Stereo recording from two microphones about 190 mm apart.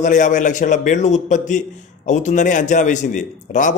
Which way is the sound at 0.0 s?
40° left (ahead or behind).